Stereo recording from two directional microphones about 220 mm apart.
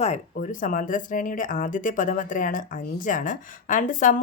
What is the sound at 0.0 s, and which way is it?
Speech, 35° left (ahead or behind).